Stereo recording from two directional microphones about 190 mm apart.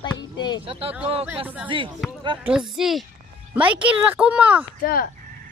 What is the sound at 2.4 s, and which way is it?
A woman's voice, 5° right (ahead or behind).